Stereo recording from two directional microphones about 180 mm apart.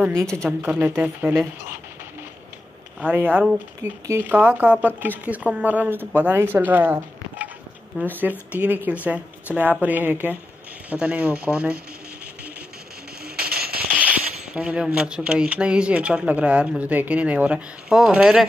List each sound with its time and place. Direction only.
0.0 s a woman's voice: 5° left (ahead or behind)
0.6 s speech: 10° right (ahead or behind)
3.0 s speech: 10° right (ahead or behind)
13.2 s music: 55° right (ahead or behind)
13.7 s speech: 10° right (ahead or behind)